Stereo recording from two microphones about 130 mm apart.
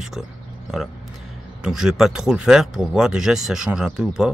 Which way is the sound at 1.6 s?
5° right (ahead or behind).